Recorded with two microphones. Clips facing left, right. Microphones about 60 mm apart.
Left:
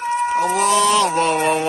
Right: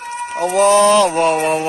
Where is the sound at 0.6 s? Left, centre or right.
Right.